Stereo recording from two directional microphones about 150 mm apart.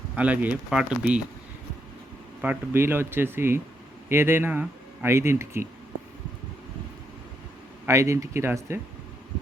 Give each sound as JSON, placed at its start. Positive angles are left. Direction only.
{"t": 0.2, "sound": "speech", "side_deg": -10}
{"t": 2.4, "sound": "speech", "side_deg": -15}
{"t": 7.9, "sound": "speech", "side_deg": -20}